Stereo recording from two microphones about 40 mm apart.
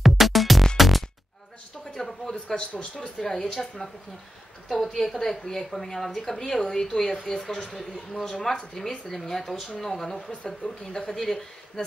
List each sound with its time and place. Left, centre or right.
0.0 s music: centre
2.0 s a woman's voice: centre
2.5 s speech: left
3.2 s a woman's voice: centre
11.1 s speech: centre